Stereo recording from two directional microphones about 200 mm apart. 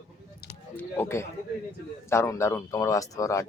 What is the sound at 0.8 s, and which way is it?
Speech, 10° left (ahead or behind).